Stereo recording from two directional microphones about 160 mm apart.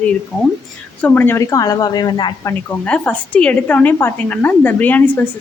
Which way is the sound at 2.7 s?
5° left (ahead or behind).